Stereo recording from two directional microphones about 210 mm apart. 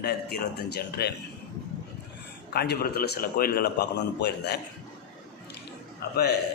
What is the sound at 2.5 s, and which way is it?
A man's voice, 45° left (ahead or behind).